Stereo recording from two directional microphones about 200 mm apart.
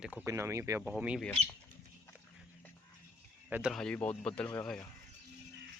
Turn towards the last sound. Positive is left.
turn(degrees=10)  # may be behind; listen again after turning